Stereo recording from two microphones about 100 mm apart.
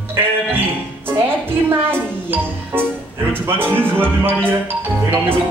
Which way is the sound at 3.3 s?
20° right (ahead or behind).